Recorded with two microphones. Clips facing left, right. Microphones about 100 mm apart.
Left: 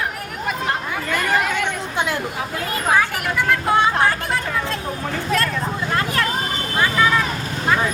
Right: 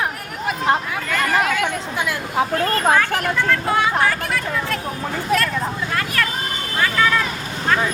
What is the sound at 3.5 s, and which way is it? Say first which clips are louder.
Speech: left 3 dB; 25° left (ahead or behind).